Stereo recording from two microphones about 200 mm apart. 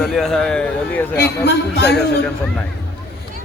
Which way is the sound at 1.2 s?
55° left (ahead or behind).